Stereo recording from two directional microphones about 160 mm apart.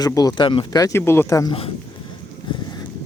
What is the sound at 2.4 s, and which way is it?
Boat, 30° left (ahead or behind).